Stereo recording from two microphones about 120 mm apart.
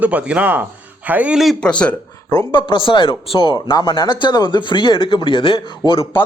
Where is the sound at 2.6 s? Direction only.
40° left (ahead or behind).